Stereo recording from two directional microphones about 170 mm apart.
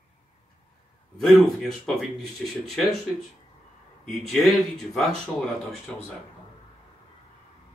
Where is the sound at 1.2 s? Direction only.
Centre (ahead or behind).